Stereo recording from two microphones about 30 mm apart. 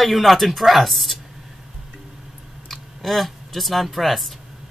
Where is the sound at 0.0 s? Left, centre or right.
Centre.